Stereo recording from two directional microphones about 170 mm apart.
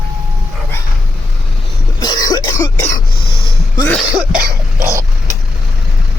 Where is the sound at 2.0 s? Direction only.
25° left (ahead or behind).